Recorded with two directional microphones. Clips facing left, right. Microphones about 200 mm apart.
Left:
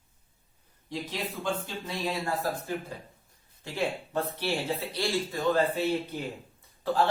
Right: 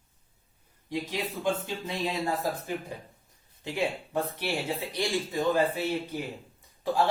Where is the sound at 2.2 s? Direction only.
20° right (ahead or behind).